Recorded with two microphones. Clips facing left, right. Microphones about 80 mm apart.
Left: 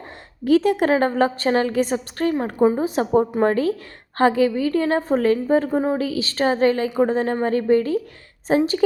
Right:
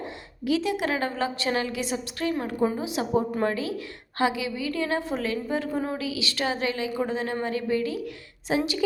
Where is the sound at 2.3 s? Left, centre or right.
Left.